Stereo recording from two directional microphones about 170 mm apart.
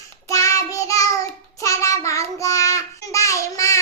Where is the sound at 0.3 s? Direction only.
20° left (ahead or behind).